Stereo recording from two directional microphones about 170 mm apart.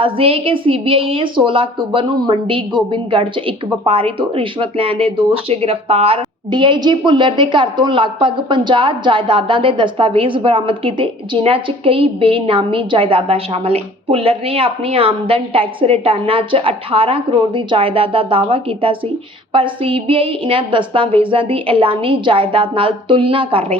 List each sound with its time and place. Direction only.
0.0 s a woman's voice: 35° right (ahead or behind)